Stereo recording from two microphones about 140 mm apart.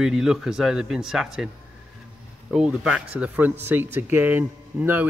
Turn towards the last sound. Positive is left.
turn(degrees=-15)  # may be behind; listen again after turning